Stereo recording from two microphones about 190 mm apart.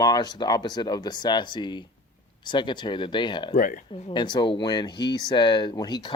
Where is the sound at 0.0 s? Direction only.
20° left (ahead or behind).